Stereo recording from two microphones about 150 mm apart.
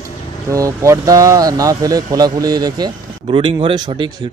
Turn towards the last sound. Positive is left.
turn(degrees=-30)  # may be behind; listen again after turning